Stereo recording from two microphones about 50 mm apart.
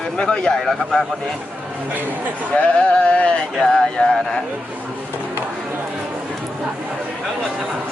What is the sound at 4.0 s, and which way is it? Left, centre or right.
Speech, centre.